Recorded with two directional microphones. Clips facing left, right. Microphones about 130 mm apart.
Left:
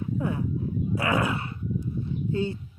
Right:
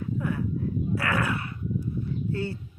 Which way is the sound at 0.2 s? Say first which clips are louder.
Left 1 dB; 25° left (ahead or behind).